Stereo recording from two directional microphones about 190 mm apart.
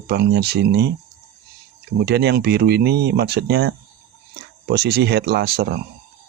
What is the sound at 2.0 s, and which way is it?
Speech, 60° right (ahead or behind).